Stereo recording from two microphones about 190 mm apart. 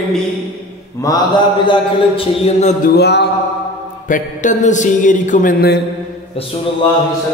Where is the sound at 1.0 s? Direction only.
20° left (ahead or behind).